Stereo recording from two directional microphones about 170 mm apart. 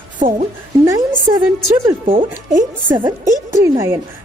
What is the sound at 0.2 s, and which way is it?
Speech, 50° right (ahead or behind).